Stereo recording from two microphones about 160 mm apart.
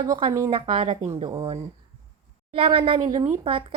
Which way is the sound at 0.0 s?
20° right (ahead or behind).